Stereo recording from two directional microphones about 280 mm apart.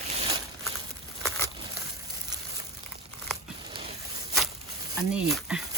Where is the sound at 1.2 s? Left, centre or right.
Centre.